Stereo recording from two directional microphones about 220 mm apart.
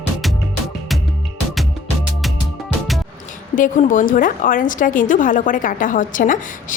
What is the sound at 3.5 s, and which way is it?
A woman's voice, 35° left (ahead or behind).